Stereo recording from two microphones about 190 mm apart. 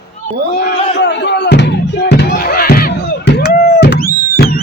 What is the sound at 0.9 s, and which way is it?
Music, 65° left (ahead or behind).